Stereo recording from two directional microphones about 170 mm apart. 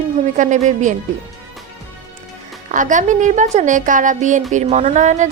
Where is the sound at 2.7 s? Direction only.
50° right (ahead or behind).